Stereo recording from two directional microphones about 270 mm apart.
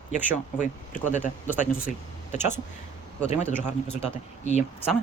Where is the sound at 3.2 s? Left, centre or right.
Left.